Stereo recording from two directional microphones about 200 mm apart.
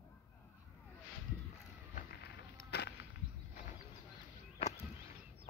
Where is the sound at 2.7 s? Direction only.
55° left (ahead or behind).